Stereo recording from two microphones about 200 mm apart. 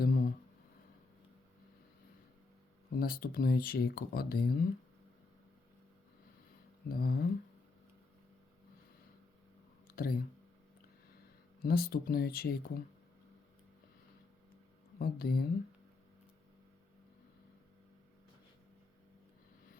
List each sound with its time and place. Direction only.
0.0 s a sound: 45° left (ahead or behind)
2.9 s speech: 50° left (ahead or behind)
6.8 s speech: 50° left (ahead or behind)
9.8 s a sound: 50° left (ahead or behind)
11.6 s speech: 50° left (ahead or behind)
14.9 s speech: 50° left (ahead or behind)